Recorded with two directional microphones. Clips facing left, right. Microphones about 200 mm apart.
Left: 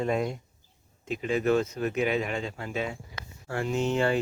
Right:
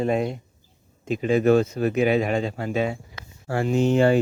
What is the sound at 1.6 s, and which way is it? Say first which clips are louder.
Speech: right 6 dB; 35° right (ahead or behind).